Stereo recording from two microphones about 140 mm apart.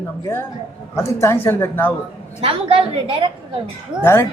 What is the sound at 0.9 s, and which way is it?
Speech, 20° left (ahead or behind).